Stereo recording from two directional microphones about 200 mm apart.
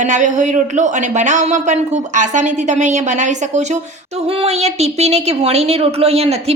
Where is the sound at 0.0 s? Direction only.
40° right (ahead or behind).